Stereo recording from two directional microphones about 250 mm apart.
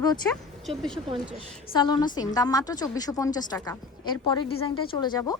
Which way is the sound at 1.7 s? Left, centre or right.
Centre.